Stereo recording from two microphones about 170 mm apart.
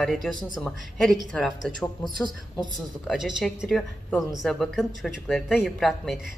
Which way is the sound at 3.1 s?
Centre (ahead or behind).